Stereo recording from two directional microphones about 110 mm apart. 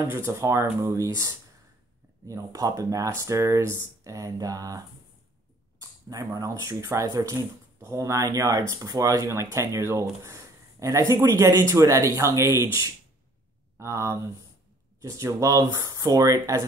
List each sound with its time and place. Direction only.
0.1 s speech: 25° right (ahead or behind)
13.7 s speech: 25° right (ahead or behind)